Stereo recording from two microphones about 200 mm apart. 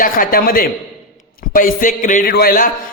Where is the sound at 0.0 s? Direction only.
45° left (ahead or behind).